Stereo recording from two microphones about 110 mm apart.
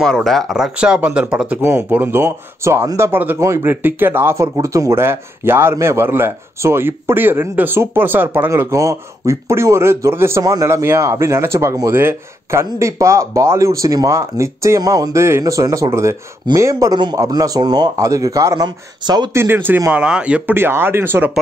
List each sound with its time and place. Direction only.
0.0 s speech: centre (ahead or behind)
1.6 s speech: 20° right (ahead or behind)
16.9 s a man's voice: 40° right (ahead or behind)
19.3 s speech: 20° right (ahead or behind)